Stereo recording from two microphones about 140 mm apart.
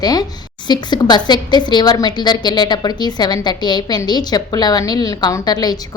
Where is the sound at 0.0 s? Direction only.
30° left (ahead or behind).